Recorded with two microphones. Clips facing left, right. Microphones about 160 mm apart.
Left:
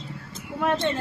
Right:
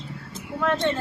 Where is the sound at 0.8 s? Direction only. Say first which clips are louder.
Right 1 dB; 20° left (ahead or behind).